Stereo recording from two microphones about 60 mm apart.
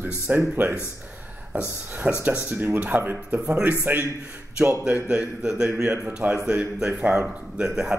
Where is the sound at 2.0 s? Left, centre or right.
Right.